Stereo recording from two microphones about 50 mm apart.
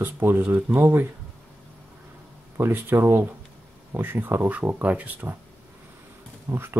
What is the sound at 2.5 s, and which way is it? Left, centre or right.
Speech, right.